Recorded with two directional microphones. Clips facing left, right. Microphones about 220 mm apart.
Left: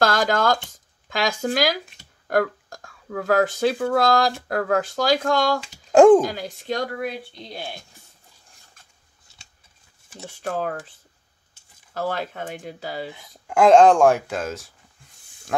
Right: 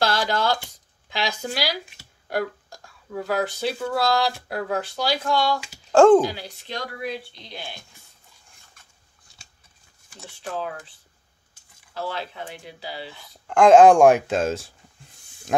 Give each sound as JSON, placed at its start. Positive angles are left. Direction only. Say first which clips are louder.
{"t": 0.0, "sound": "speech", "louder": "left 3 dB", "side_deg": 50}
{"t": 5.9, "sound": "speech", "louder": "left 2 dB", "side_deg": 15}
{"t": 6.2, "sound": "speech", "louder": "left 2 dB", "side_deg": 45}
{"t": 10.1, "sound": "speech", "louder": "left 4 dB", "side_deg": 45}
{"t": 11.9, "sound": "speech", "louder": "left 4 dB", "side_deg": 45}
{"t": 13.1, "sound": "speech", "louder": "left 1 dB", "side_deg": 20}
{"t": 13.6, "sound": "speech", "louder": "right 1 dB", "side_deg": -5}